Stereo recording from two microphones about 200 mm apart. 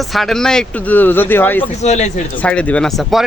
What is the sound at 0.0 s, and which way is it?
Speech, centre (ahead or behind).